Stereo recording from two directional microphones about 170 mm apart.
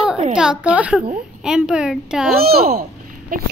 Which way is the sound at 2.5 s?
60° right (ahead or behind).